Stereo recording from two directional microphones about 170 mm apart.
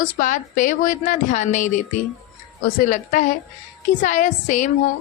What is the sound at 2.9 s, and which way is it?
A woman's voice, 50° left (ahead or behind).